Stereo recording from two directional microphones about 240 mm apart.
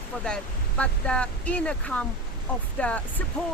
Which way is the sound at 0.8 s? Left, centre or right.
Centre.